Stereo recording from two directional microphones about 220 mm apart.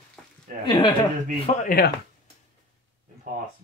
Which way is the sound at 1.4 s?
40° left (ahead or behind).